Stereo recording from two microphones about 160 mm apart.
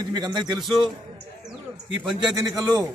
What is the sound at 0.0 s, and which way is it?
Speech, 25° right (ahead or behind).